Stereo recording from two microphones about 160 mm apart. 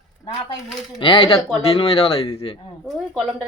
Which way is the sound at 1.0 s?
35° left (ahead or behind).